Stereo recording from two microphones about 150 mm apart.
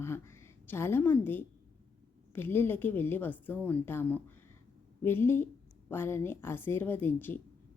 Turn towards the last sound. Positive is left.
turn(degrees=15)  # may be behind; listen again after turning